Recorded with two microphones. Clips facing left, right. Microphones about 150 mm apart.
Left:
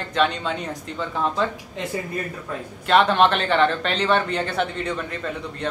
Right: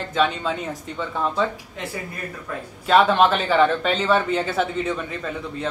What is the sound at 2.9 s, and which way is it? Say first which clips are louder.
Speech: right 1 dB; 5° right (ahead or behind).